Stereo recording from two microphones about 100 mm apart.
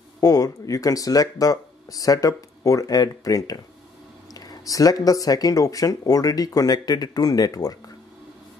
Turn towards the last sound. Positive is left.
turn(degrees=40)  # may be behind; listen again after turning